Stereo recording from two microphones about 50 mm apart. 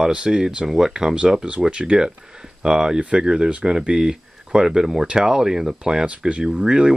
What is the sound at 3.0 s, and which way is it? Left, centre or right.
Speech, right.